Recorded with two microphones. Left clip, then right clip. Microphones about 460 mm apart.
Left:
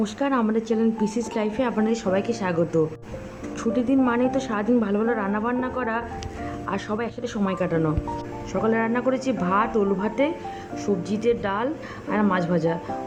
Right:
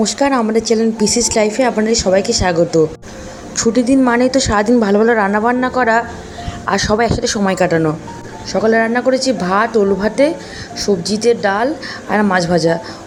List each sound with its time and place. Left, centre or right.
0.2 s a woman's voice: left